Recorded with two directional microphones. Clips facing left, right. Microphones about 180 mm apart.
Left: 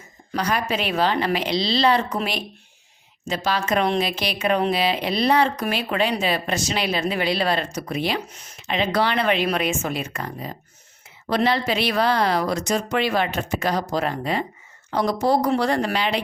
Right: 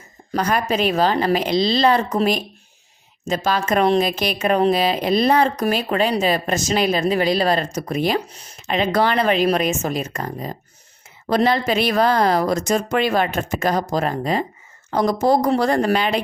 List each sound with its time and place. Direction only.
0.3 s speech: 45° right (ahead or behind)